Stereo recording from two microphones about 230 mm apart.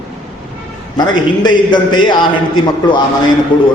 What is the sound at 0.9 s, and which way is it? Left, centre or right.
A man's voice, centre.